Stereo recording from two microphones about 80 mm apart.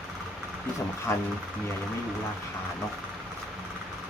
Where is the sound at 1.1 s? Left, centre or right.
Left.